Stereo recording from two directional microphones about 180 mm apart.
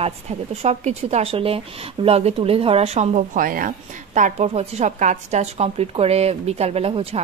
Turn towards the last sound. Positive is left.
turn(degrees=-35)  # may be behind; listen again after turning